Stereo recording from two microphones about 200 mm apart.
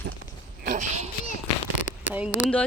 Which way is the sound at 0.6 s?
40° right (ahead or behind).